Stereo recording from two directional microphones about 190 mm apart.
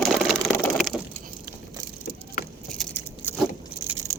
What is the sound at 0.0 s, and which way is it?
Vehicle, centre (ahead or behind).